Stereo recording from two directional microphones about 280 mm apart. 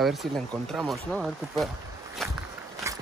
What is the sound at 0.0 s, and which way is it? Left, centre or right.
Speech, centre.